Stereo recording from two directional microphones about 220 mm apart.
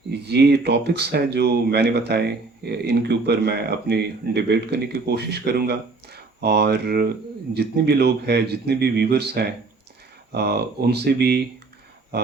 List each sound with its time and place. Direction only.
0.1 s speech: 50° right (ahead or behind)